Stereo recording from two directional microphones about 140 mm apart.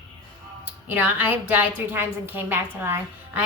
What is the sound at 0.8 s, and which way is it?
A woman's voice, 10° right (ahead or behind).